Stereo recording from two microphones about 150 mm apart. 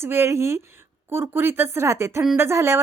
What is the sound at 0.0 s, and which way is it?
Speech, 15° right (ahead or behind).